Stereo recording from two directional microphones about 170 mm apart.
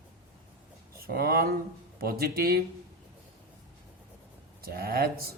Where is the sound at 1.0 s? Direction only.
65° right (ahead or behind).